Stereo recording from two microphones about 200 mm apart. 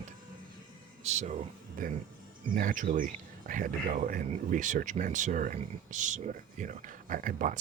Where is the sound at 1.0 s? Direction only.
35° right (ahead or behind).